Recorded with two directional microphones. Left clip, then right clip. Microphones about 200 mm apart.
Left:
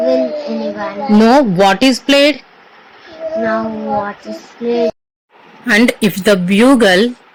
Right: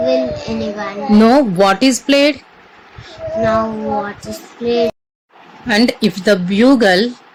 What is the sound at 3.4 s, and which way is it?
Speech, 15° right (ahead or behind).